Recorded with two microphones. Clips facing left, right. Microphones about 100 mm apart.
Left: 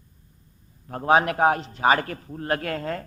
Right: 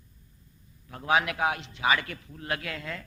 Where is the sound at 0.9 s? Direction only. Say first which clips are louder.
Left 6 dB; 40° left (ahead or behind).